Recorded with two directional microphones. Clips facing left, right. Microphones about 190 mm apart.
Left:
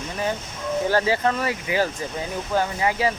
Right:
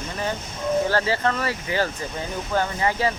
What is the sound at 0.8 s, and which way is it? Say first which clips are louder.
Speech: left 2 dB; 15° left (ahead or behind).